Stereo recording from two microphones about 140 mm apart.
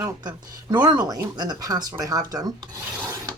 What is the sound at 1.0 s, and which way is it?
Speech, 30° right (ahead or behind).